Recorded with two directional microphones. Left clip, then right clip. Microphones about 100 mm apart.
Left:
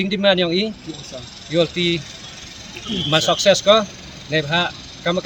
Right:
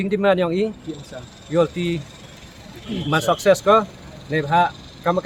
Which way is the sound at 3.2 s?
40° right (ahead or behind).